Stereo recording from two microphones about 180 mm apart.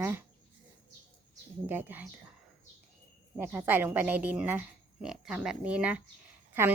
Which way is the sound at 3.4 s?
10° right (ahead or behind).